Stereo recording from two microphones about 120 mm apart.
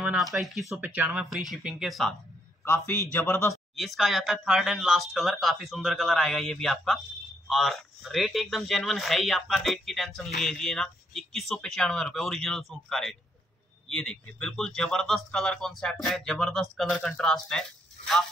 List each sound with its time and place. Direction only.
0.2 s speech: centre (ahead or behind)
0.7 s speech: 15° right (ahead or behind)
1.1 s speech: centre (ahead or behind)
2.6 s a man's voice: 20° left (ahead or behind)
3.7 s speech: centre (ahead or behind)